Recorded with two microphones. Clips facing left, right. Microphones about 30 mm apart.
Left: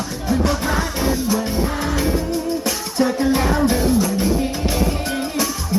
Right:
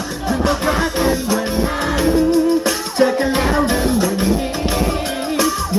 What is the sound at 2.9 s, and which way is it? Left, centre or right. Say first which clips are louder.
Music: right 2 dB; right.